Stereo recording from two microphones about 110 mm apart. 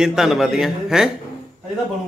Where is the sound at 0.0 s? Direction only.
5° right (ahead or behind).